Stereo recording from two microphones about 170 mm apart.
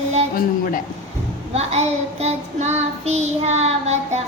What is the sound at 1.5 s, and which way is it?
Child singing, 40° right (ahead or behind).